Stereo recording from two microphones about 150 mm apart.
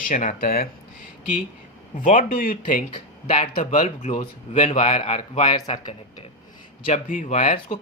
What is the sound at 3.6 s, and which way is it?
A woman's voice, 50° left (ahead or behind).